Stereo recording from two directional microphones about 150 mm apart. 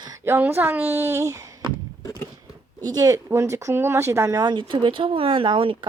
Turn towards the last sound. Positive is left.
turn(degrees=-35)  # may be behind; listen again after turning